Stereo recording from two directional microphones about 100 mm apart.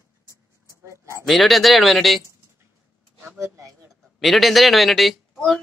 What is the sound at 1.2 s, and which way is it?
A man's voice, centre (ahead or behind).